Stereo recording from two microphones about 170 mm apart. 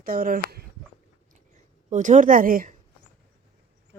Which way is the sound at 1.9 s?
45° right (ahead or behind).